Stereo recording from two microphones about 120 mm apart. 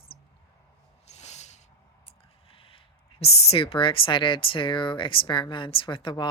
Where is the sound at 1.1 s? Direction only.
70° left (ahead or behind).